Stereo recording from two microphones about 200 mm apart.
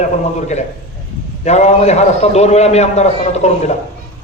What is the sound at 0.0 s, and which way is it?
A man's voice, 35° left (ahead or behind).